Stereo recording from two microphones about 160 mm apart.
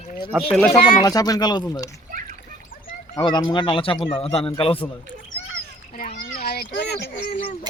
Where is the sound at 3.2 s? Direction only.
25° left (ahead or behind).